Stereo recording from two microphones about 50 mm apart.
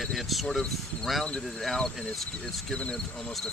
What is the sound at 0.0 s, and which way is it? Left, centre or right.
Speech, centre.